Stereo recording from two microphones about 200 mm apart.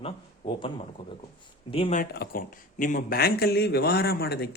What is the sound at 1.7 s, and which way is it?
Speech, 30° left (ahead or behind).